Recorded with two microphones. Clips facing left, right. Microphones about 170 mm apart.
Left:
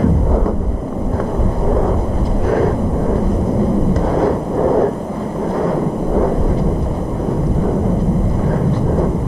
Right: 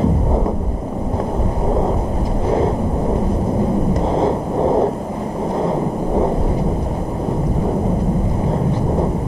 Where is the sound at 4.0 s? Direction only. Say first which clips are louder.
Left 2 dB; 25° right (ahead or behind).